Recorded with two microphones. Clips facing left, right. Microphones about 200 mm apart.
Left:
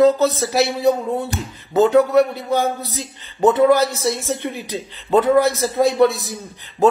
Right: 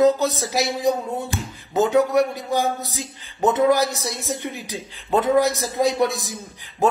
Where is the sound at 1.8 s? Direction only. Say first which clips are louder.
Left 4 dB; 15° right (ahead or behind).